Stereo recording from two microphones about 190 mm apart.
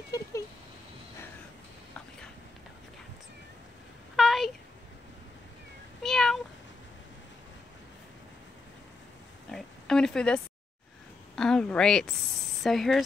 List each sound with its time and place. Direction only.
0.1 s cat: 20° left (ahead or behind)
4.2 s a sound: centre (ahead or behind)
6.0 s meow: centre (ahead or behind)
9.5 s oink: 5° left (ahead or behind)
11.3 s a sound: 5° left (ahead or behind)
12.6 s speech: centre (ahead or behind)